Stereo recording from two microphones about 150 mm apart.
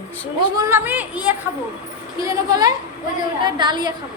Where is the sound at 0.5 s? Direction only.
15° right (ahead or behind).